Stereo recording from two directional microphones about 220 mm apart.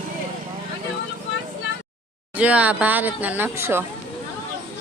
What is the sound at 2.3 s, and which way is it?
Speech, 5° right (ahead or behind).